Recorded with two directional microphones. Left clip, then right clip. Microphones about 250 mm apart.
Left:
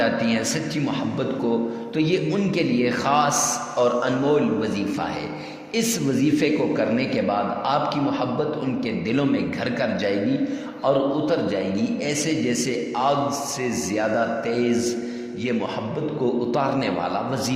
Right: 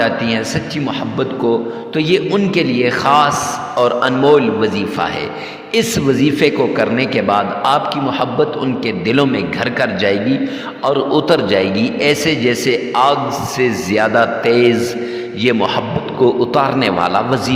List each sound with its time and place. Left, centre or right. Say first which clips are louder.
2.0 s a man's voice: right 8 dB; right
9.0 s a man's voice: right 9 dB; right